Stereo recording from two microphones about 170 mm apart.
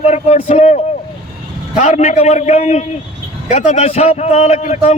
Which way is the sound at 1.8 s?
40° left (ahead or behind).